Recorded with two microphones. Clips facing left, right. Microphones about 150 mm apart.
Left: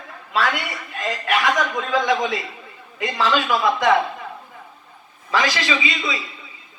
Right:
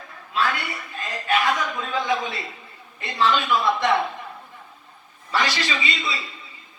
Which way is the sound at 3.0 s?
90° left.